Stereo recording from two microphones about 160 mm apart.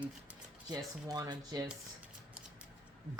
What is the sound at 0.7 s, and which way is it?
Speech, 25° right (ahead or behind).